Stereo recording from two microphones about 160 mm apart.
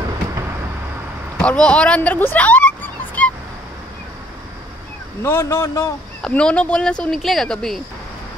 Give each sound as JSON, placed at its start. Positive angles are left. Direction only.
{"t": 1.4, "sound": "a sound", "side_deg": 5}
{"t": 5.2, "sound": "a man's voice", "side_deg": 15}
{"t": 6.2, "sound": "speech", "side_deg": 5}